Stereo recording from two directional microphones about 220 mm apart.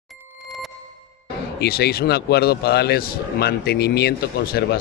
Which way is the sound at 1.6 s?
45° left (ahead or behind).